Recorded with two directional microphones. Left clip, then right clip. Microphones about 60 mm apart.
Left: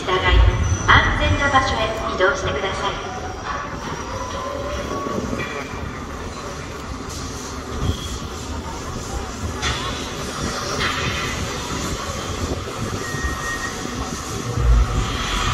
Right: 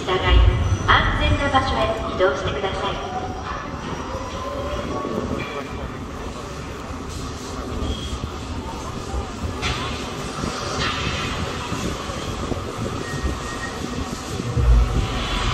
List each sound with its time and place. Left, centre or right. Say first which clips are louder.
0.0 s a sound: left 2 dB; left
10.7 s music: left 2 dB; left
15.0 s vehicle: left 3 dB; left